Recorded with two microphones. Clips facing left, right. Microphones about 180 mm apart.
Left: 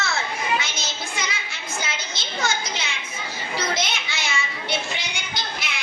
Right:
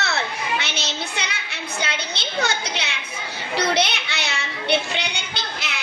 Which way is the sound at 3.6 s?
65° right (ahead or behind).